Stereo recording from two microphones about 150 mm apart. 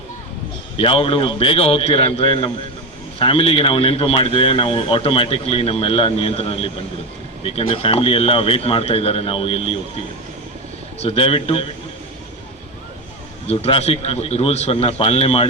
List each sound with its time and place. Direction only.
0.8 s speech: 35° left (ahead or behind)
11.0 s speech: 40° left (ahead or behind)
13.5 s speech: 40° left (ahead or behind)